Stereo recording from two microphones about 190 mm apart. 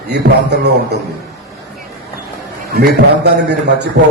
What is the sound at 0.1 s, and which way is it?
Speech, 60° right (ahead or behind).